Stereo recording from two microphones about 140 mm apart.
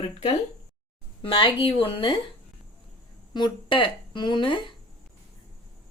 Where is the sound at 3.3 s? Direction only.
35° left (ahead or behind).